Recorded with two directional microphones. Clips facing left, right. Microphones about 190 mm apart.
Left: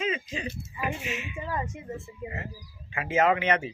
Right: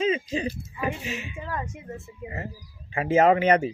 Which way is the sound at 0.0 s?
30° right (ahead or behind).